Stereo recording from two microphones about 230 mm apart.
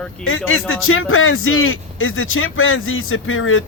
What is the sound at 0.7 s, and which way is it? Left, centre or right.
Speech, left.